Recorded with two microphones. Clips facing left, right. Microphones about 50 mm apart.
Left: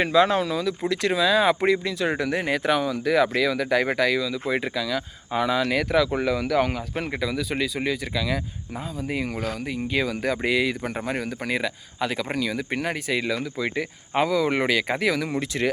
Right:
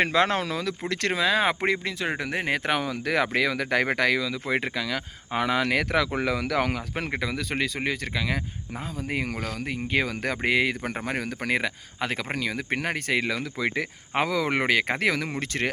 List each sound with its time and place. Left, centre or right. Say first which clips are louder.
0.0 s speech: left 3 dB; right
0.9 s speech: left 3 dB; right
7.1 s speech: left 2 dB; right
9.0 s speech: left 2 dB; right
11.0 s speech: left 1 dB; right
14.6 s speech: left 1 dB; right